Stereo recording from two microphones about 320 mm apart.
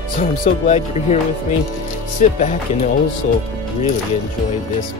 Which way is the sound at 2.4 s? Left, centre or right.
Left.